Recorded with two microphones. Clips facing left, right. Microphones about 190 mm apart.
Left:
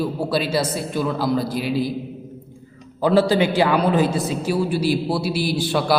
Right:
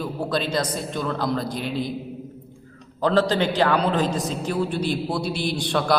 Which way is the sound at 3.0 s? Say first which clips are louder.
Left 3 dB; 10° left (ahead or behind).